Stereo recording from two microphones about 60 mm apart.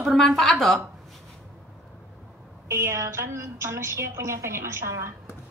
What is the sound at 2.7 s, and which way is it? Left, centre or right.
A woman's voice, right.